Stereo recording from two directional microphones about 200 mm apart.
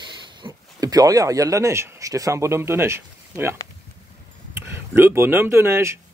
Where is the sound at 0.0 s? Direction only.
25° right (ahead or behind).